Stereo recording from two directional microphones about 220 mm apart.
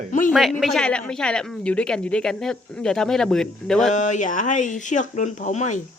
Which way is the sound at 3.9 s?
35° left (ahead or behind).